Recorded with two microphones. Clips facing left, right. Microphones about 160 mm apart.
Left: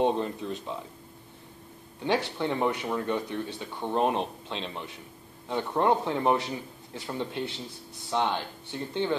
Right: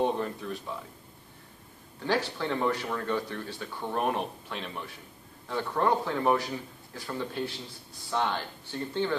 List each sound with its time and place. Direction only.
0.0 s speech: 20° left (ahead or behind)
2.0 s speech: 20° left (ahead or behind)